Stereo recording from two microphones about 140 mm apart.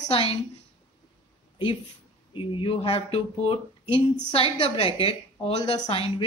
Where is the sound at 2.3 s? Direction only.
40° left (ahead or behind).